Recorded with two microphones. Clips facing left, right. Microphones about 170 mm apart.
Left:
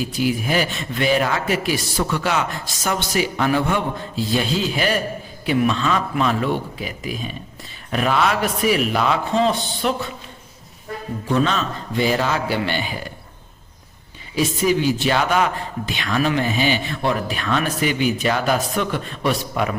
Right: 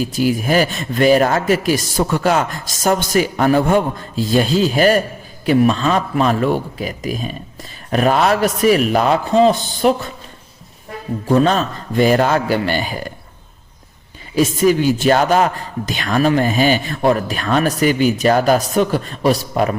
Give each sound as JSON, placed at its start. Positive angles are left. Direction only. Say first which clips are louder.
{"t": 0.0, "sound": "a man's voice", "louder": "right 4 dB", "side_deg": -40}
{"t": 11.3, "sound": "a man's voice", "louder": "right 6 dB", "side_deg": -45}
{"t": 14.3, "sound": "a man's voice", "louder": "right 5 dB", "side_deg": -45}